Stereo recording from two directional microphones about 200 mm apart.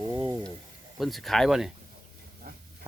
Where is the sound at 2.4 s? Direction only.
40° right (ahead or behind).